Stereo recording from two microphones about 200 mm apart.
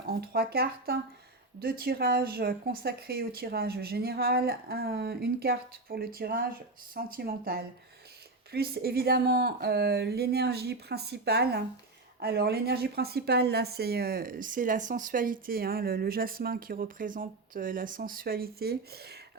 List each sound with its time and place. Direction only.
0.1 s speech: 50° right (ahead or behind)